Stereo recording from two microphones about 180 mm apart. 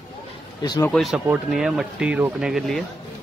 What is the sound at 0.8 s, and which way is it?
Speech, centre (ahead or behind).